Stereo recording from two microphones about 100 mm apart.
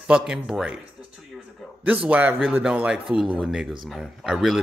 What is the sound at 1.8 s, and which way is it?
A man's voice, 15° right (ahead or behind).